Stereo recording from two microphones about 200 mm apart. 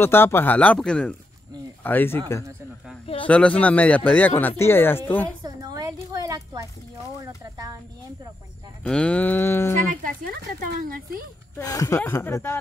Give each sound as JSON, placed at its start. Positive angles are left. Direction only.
{"t": 0.0, "sound": "a man's voice", "side_deg": 10}
{"t": 5.4, "sound": "a sound", "side_deg": -20}
{"t": 8.8, "sound": "a man's voice", "side_deg": 5}
{"t": 10.0, "sound": "speech", "side_deg": -45}
{"t": 11.5, "sound": "a man's voice", "side_deg": 15}